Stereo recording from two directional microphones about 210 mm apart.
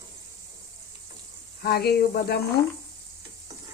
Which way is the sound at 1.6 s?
50° left (ahead or behind).